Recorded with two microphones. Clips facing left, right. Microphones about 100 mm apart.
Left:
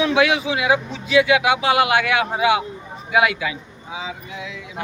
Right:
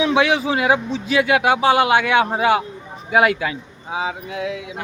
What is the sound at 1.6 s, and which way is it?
Speech, 30° right (ahead or behind).